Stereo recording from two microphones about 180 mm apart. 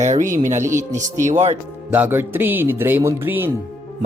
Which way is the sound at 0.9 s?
45° right (ahead or behind).